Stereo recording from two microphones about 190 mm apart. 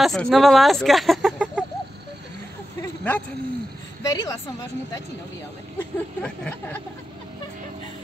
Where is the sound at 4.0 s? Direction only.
20° left (ahead or behind).